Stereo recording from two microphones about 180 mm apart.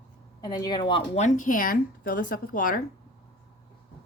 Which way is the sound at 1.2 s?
45° left (ahead or behind).